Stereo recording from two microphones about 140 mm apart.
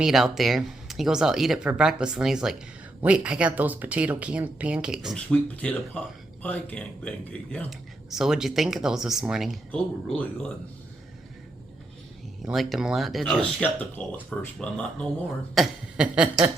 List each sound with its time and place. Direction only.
0.0 s speech: centre (ahead or behind)
7.7 s speech: 5° right (ahead or behind)
12.4 s speech: centre (ahead or behind)
13.6 s speech: 10° left (ahead or behind); by 16.3 s 5° right (ahead or behind)